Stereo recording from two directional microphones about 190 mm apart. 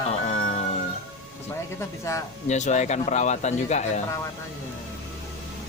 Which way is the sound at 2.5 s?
40° left (ahead or behind).